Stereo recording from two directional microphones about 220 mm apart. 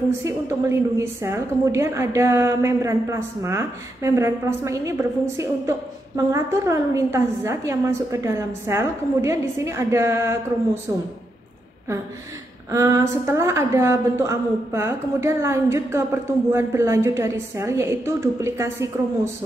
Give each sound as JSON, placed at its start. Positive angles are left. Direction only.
{"t": 0.2, "sound": "a woman's voice", "side_deg": -15}
{"t": 12.7, "sound": "a woman's voice", "side_deg": -15}